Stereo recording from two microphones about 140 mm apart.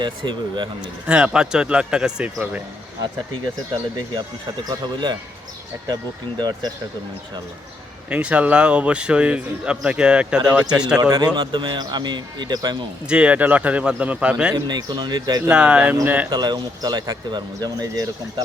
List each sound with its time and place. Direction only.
0.0 s speech: 35° right (ahead or behind)
1.0 s a man's voice: 5° right (ahead or behind)
4.7 s speech: 35° right (ahead or behind)
8.1 s a man's voice: 10° right (ahead or behind)
11.1 s speech: 30° right (ahead or behind)
13.1 s a man's voice: 10° right (ahead or behind)
14.5 s speech: 30° right (ahead or behind)
15.4 s a man's voice: 5° right (ahead or behind)
16.3 s speech: 30° right (ahead or behind)